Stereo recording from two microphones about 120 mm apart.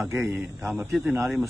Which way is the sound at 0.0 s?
20° right (ahead or behind).